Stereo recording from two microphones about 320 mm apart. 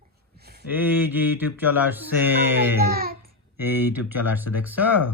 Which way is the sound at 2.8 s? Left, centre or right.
Right.